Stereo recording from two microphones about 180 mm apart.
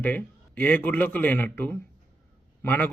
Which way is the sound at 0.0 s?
10° left (ahead or behind).